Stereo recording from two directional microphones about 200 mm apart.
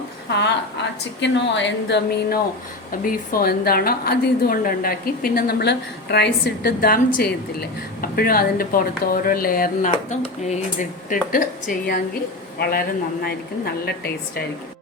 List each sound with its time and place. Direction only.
0.3 s speech: 60° left (ahead or behind)
3.0 s a woman's voice: 45° left (ahead or behind)
13.8 s a woman's voice: 50° left (ahead or behind)